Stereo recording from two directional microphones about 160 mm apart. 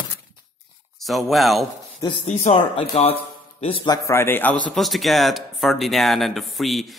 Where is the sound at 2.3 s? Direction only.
45° left (ahead or behind).